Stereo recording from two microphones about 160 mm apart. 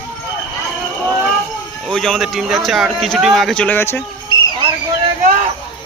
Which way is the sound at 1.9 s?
5° left (ahead or behind).